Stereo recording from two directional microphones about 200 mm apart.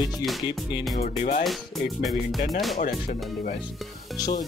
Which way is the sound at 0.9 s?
35° left (ahead or behind).